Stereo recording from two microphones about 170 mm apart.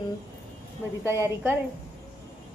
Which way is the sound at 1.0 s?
15° right (ahead or behind).